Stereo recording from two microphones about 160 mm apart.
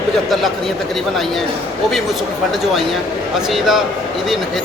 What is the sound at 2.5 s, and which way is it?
Speech, centre (ahead or behind).